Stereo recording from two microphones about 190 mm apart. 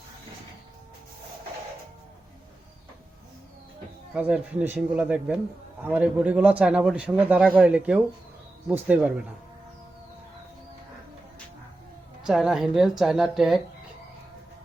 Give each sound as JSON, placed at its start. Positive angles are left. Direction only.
{"t": 4.1, "sound": "a man's voice", "side_deg": -10}
{"t": 12.2, "sound": "a woman's voice", "side_deg": 0}